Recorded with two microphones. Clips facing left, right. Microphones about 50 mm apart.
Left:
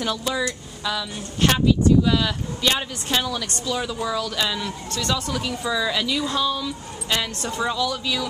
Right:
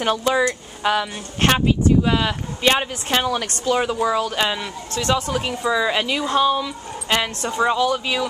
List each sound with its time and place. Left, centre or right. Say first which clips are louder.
0.0 s speech: right 6 dB; right